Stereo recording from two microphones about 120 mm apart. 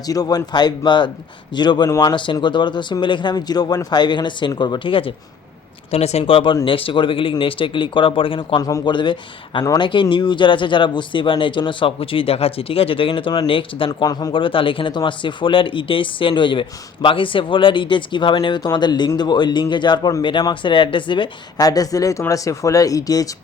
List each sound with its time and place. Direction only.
0.0 s speech: 30° left (ahead or behind)
5.9 s speech: 60° left (ahead or behind); by 8.6 s 45° left (ahead or behind)
8.6 s speech: 35° left (ahead or behind)
14.1 s speech: 35° left (ahead or behind)